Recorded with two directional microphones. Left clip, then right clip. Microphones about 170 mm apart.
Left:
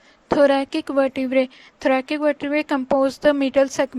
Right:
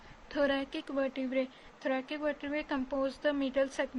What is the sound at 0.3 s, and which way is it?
A woman's voice, 40° left (ahead or behind).